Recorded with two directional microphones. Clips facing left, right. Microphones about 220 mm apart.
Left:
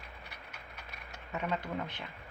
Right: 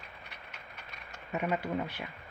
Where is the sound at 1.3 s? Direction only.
15° right (ahead or behind).